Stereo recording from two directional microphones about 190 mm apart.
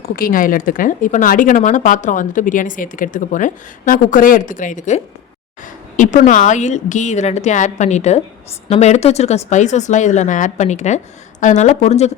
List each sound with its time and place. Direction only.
0.2 s speech: 45° left (ahead or behind)